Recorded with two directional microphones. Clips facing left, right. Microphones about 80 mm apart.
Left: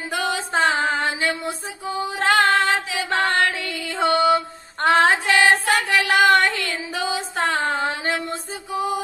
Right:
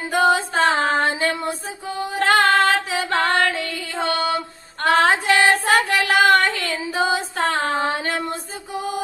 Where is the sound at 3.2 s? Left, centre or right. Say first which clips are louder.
Right 1 dB; right.